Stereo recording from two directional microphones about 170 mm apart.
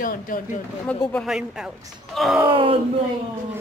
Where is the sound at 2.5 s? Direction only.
30° right (ahead or behind).